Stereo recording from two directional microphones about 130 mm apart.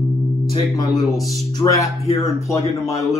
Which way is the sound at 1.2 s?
25° left (ahead or behind).